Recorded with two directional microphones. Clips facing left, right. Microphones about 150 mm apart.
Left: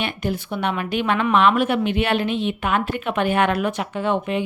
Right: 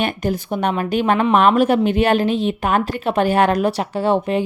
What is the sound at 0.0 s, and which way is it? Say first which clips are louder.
A woman's voice: right 4 dB; 45° right (ahead or behind).